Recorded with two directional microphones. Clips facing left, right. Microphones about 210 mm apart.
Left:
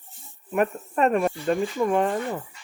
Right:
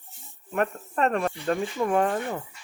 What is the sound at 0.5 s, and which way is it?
Speech, 10° left (ahead or behind).